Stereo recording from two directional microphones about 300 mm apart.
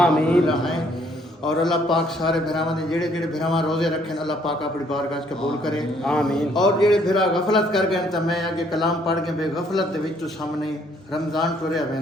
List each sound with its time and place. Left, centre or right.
0.0 s a man's voice: centre
11.1 s a man's voice: centre